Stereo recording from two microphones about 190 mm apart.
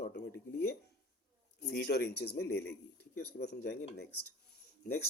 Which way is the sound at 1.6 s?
60° left (ahead or behind).